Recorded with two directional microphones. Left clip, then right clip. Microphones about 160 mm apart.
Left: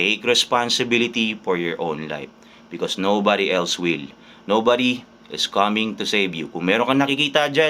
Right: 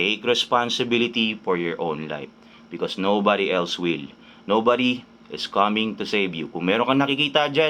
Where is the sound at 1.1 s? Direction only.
45° left (ahead or behind).